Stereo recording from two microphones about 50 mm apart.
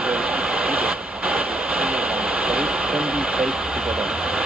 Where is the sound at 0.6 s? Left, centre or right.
Right.